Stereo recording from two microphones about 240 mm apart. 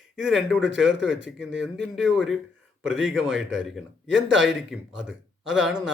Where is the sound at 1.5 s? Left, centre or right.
Centre.